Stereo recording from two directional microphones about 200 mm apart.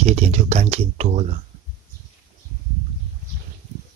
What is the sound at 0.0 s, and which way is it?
Speech, 35° right (ahead or behind).